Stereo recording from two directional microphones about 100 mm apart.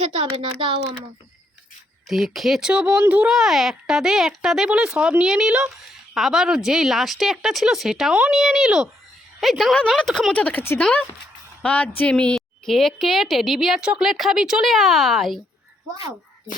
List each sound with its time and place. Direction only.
0.6 s speech: 55° right (ahead or behind)
2.0 s a woman's voice: centre (ahead or behind)
10.3 s a woman's voice: 15° left (ahead or behind)